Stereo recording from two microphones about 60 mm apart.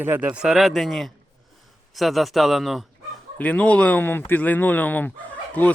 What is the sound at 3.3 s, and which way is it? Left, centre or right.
Speech, left.